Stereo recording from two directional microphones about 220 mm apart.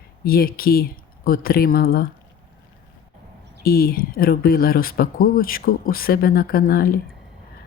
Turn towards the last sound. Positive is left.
turn(degrees=40)  # may be behind; listen again after turning